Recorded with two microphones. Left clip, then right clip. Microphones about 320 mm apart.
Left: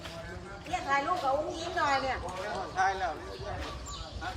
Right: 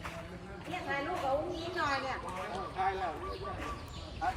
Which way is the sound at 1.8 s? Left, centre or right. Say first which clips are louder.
Left 5 dB; left.